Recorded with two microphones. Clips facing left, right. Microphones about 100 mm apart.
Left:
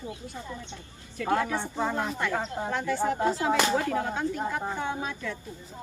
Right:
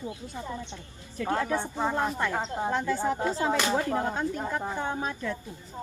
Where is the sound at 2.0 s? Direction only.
25° right (ahead or behind).